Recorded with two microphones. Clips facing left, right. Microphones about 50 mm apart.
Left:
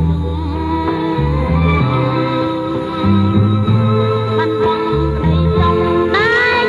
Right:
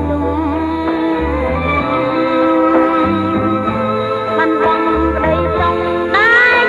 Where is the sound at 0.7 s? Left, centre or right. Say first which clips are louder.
Right 1 dB; centre.